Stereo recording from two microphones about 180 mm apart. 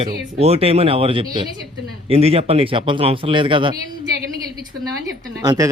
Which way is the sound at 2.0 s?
35° right (ahead or behind).